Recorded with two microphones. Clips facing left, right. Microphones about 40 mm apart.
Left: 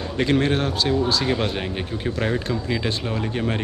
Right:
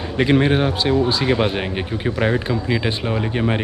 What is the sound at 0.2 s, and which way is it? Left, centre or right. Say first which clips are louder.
Speech: right 4 dB; centre.